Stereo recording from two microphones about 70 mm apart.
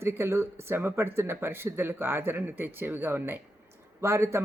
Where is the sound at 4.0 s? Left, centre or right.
Right.